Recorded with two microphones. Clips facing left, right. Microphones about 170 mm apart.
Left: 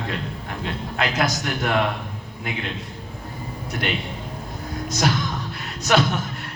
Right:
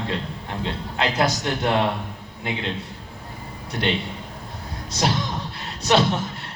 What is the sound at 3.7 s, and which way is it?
Speech, 25° right (ahead or behind).